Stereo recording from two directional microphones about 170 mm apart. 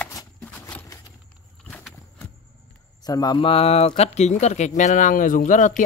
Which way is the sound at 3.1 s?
25° left (ahead or behind).